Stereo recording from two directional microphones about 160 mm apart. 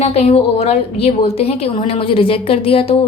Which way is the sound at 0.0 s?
40° left (ahead or behind).